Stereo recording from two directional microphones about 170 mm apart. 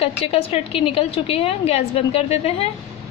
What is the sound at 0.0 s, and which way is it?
A woman's voice, 35° left (ahead or behind).